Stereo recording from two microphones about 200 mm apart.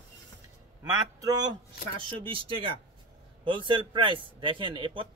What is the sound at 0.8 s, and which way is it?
A man's voice, 20° right (ahead or behind).